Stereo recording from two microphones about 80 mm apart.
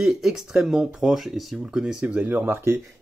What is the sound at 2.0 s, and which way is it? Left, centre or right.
Speech, right.